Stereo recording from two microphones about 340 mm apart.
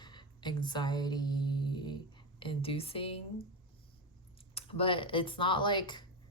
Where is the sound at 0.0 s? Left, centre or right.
Centre.